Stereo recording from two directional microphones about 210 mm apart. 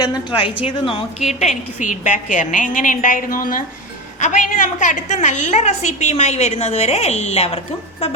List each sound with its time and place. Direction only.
0.0 s a woman's voice: 20° left (ahead or behind)